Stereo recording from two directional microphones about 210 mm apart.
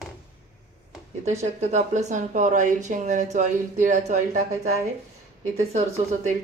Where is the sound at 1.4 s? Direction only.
35° right (ahead or behind).